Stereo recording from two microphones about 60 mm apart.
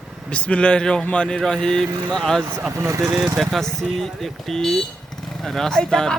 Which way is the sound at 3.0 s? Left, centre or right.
Centre.